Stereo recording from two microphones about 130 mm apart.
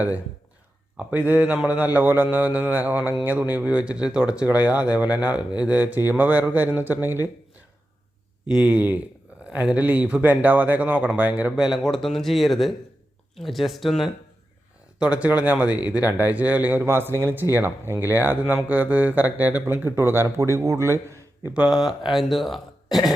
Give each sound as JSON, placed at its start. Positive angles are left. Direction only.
{"t": 0.9, "sound": "speech", "side_deg": -15}
{"t": 8.4, "sound": "speech", "side_deg": -10}
{"t": 21.5, "sound": "speech", "side_deg": -5}